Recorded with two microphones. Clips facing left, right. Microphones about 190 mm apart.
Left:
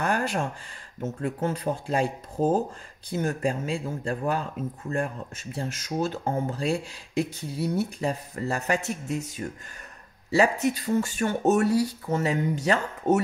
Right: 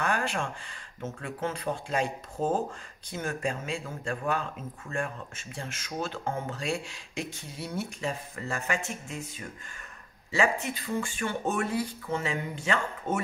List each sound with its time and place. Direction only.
0.0 s speech: 40° left (ahead or behind)